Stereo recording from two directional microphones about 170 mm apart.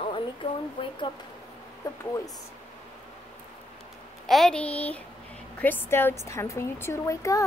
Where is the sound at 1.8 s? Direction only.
20° left (ahead or behind).